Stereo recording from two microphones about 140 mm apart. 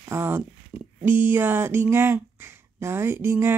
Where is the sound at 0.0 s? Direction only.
20° right (ahead or behind).